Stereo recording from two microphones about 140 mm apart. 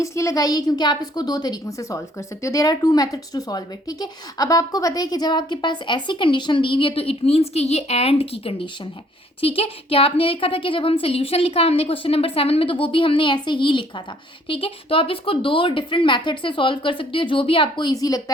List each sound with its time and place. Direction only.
0.0 s a woman's voice: 20° left (ahead or behind)